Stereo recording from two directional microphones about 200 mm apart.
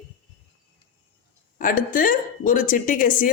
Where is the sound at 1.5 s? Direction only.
45° left (ahead or behind).